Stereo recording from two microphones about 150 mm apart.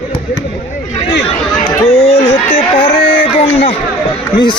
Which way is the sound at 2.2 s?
40° left (ahead or behind).